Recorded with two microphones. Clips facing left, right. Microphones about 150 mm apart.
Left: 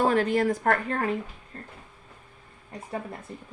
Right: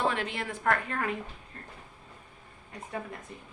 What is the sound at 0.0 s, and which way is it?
A woman's voice, 40° left (ahead or behind).